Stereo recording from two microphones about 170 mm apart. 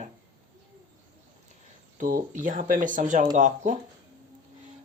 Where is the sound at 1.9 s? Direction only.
50° right (ahead or behind).